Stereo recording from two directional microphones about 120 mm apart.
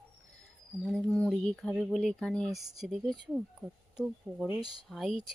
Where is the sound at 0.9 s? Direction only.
5° left (ahead or behind).